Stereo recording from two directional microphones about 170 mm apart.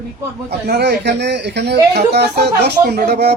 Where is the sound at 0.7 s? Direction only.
75° right (ahead or behind).